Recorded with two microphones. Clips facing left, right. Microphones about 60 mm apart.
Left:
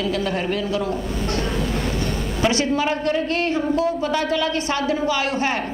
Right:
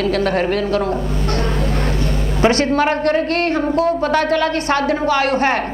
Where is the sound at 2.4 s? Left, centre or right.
Right.